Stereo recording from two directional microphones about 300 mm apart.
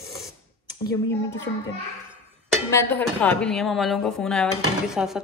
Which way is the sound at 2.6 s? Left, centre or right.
Centre.